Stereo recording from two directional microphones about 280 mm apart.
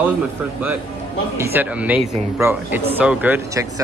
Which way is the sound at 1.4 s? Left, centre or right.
Centre.